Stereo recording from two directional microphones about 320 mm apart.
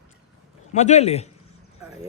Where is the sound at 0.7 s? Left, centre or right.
Left.